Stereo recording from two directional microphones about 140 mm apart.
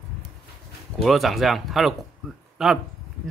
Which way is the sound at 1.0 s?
Centre (ahead or behind).